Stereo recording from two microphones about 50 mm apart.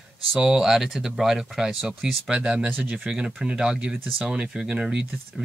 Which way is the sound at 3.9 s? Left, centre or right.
Right.